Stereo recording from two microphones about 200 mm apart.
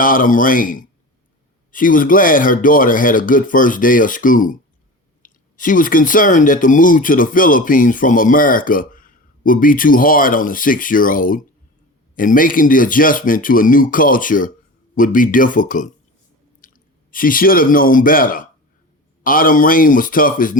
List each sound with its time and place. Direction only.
0.0 s speech: 45° left (ahead or behind)